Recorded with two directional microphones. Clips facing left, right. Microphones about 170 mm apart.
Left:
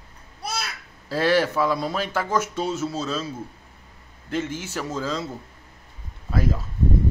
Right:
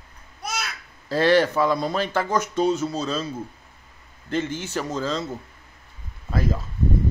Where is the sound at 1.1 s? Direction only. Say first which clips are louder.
Right 2 dB; 5° left (ahead or behind).